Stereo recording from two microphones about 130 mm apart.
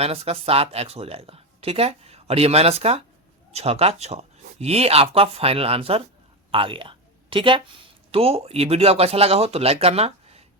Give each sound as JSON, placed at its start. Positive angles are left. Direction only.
{"t": 0.0, "sound": "speech", "side_deg": -50}